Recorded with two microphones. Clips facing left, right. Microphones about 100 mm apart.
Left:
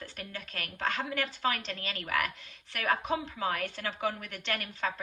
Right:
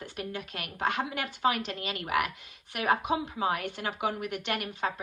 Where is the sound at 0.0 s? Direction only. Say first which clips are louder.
Right 5 dB; 15° right (ahead or behind).